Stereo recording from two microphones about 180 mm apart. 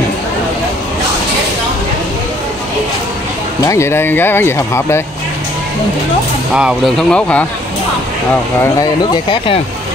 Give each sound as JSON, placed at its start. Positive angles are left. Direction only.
{"t": 3.6, "sound": "speech", "side_deg": 15}
{"t": 6.5, "sound": "speech", "side_deg": 0}
{"t": 9.1, "sound": "speech", "side_deg": 25}